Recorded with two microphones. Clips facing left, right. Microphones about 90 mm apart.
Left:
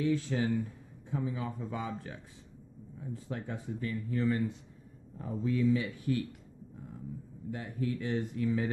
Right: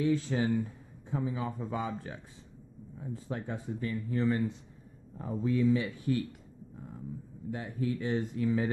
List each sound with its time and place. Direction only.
0.0 s speech: 25° right (ahead or behind)
7.5 s speech: 25° right (ahead or behind)